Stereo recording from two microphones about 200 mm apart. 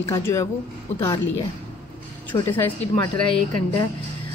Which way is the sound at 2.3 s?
10° left (ahead or behind).